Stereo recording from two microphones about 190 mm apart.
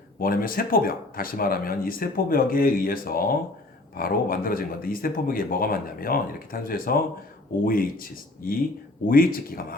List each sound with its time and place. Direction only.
0.2 s speech: 50° left (ahead or behind)